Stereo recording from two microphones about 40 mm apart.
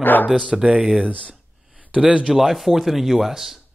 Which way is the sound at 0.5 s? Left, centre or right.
Right.